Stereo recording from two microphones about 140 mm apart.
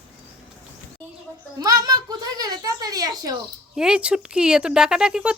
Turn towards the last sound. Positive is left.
turn(degrees=-5)  # may be behind; listen again after turning